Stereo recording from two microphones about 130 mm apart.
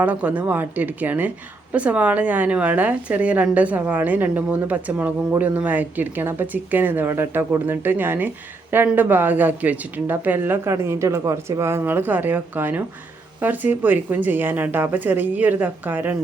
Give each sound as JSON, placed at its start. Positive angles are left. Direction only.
{"t": 0.0, "sound": "a woman's voice", "side_deg": -10}